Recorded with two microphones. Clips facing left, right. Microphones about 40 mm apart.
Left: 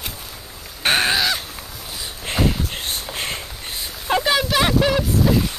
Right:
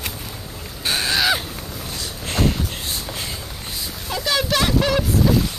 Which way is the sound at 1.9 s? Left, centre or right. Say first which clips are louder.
Left 1 dB; centre.